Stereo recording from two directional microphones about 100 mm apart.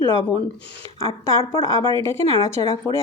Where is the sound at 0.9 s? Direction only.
30° left (ahead or behind).